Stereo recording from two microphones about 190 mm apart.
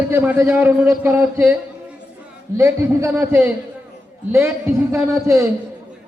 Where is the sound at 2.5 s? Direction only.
15° right (ahead or behind).